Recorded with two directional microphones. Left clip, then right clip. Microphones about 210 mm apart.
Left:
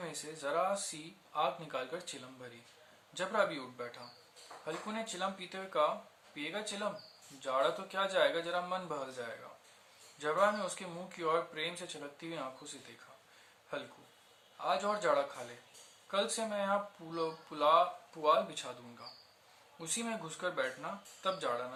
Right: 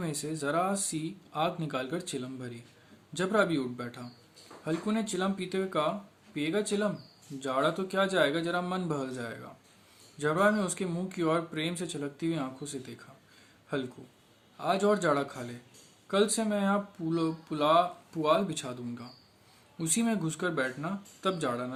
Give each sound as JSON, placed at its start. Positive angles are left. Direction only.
{"t": 0.0, "sound": "speech", "side_deg": -50}
{"t": 13.7, "sound": "speech", "side_deg": -50}